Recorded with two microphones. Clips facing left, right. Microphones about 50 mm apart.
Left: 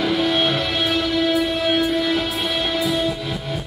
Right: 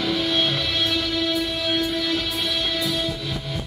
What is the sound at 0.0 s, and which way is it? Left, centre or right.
Music, centre.